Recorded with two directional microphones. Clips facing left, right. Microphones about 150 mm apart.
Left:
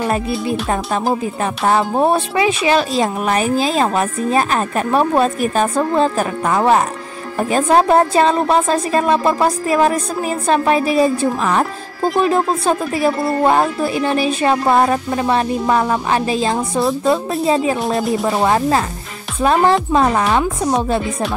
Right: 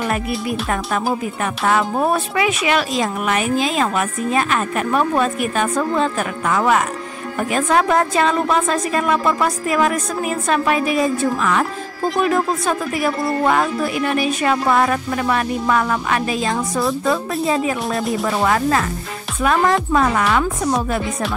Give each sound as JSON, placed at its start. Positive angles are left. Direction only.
{"t": 0.5, "sound": "speech", "side_deg": 30}
{"t": 17.9, "sound": "speech", "side_deg": 0}
{"t": 18.3, "sound": "speech", "side_deg": 25}